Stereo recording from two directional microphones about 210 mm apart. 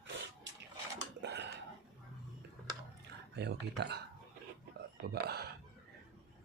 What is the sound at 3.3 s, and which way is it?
Speech, 55° right (ahead or behind).